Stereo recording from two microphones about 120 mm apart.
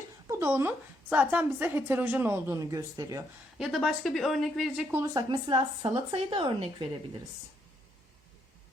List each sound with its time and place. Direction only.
0.3 s a woman's voice: 25° right (ahead or behind)
3.6 s speech: centre (ahead or behind)
4.9 s speech: 20° right (ahead or behind)
5.1 s speech: 35° right (ahead or behind)